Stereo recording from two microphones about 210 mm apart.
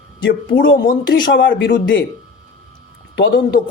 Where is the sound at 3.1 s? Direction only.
60° left (ahead or behind).